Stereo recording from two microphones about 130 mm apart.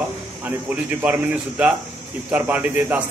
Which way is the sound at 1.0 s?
10° right (ahead or behind).